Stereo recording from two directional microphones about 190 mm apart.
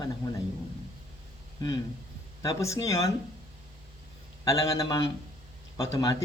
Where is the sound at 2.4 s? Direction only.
15° left (ahead or behind).